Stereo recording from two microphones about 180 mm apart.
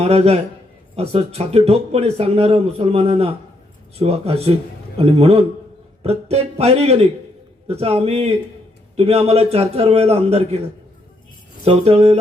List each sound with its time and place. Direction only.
0.0 s a man's voice: 35° right (ahead or behind)
11.6 s a man's voice: 35° right (ahead or behind)